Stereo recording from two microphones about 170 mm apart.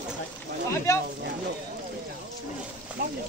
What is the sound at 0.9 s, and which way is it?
Speech, 20° left (ahead or behind).